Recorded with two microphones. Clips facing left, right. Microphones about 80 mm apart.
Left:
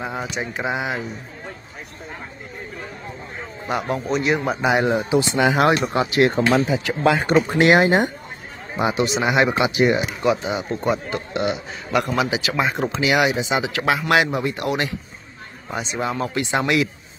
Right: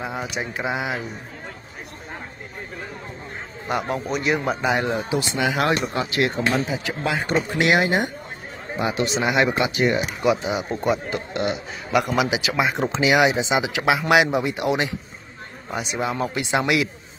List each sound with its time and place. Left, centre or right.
0.0 s a man's voice: centre
3.6 s a man's voice: centre; by 6.2 s left
6.5 s speech: left
7.5 s speech: left
8.9 s a man's voice: centre
10.2 s a man's voice: centre
12.0 s speech: centre
15.8 s a man's voice: centre